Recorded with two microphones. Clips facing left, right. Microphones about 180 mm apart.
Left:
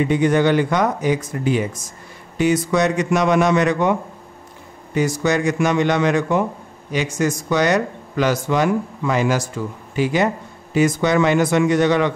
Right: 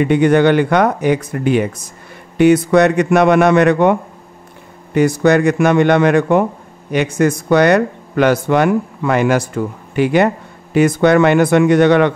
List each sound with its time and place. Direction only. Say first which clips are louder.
0.0 s speech: right 5 dB; 65° right (ahead or behind)